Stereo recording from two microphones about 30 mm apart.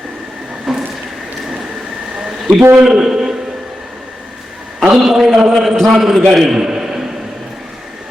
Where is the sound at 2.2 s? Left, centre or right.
Right.